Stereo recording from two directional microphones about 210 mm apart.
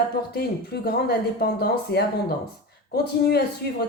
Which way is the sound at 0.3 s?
50° left (ahead or behind).